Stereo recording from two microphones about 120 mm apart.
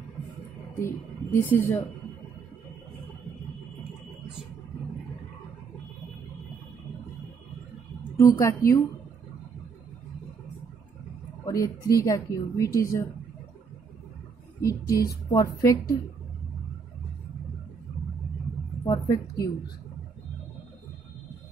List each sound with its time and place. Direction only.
0.7 s speech: 20° left (ahead or behind)
8.2 s speech: 25° left (ahead or behind)
11.4 s speech: 30° left (ahead or behind)
14.6 s speech: 30° left (ahead or behind)
18.9 s a woman's voice: 30° left (ahead or behind)